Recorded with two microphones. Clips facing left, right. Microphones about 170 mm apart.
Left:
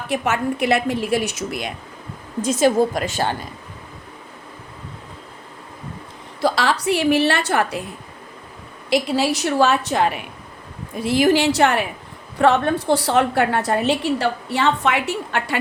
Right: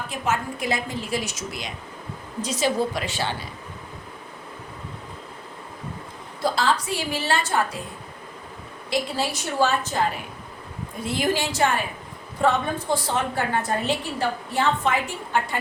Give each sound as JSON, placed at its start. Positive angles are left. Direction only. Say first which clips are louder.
{"t": 0.1, "sound": "a woman's voice", "louder": "left 7 dB", "side_deg": 70}
{"t": 2.4, "sound": "a woman's voice", "louder": "left 7 dB", "side_deg": 50}
{"t": 6.4, "sound": "a woman's voice", "louder": "left 4 dB", "side_deg": 75}
{"t": 8.9, "sound": "a woman's voice", "louder": "left 7 dB", "side_deg": 75}